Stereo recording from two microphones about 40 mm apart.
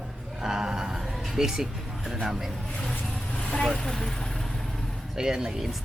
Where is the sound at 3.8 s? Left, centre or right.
Centre.